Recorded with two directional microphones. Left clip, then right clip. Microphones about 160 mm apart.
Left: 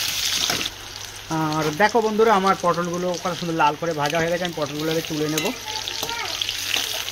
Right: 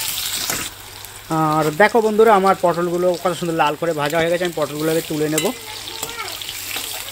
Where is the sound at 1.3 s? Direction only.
45° right (ahead or behind).